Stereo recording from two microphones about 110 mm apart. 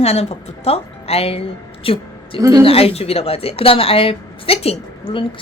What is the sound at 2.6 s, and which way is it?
Speech, 60° left (ahead or behind).